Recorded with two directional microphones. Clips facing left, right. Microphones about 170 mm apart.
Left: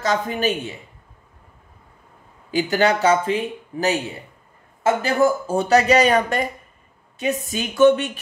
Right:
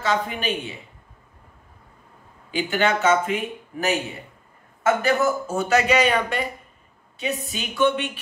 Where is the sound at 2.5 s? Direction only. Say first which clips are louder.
Left 3 dB; 40° left (ahead or behind).